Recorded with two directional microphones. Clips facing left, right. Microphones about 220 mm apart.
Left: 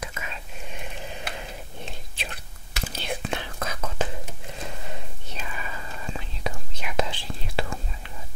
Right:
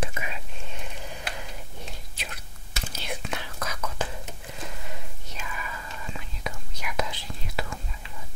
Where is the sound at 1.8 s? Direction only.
30° left (ahead or behind).